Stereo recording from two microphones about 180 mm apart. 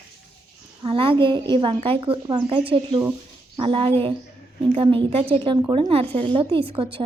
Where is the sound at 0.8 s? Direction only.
30° right (ahead or behind).